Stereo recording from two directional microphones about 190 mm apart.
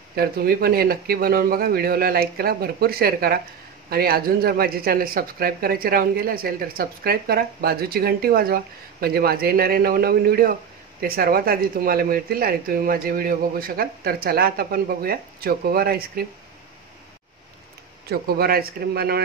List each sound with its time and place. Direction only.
0.1 s speech: 55° right (ahead or behind)
18.0 s speech: 55° right (ahead or behind)